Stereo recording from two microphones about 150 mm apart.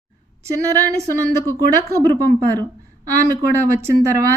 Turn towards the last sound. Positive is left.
turn(degrees=-20)  # may be behind; listen again after turning